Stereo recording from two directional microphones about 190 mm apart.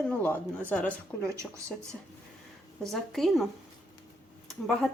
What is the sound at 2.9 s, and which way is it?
A woman's voice, centre (ahead or behind).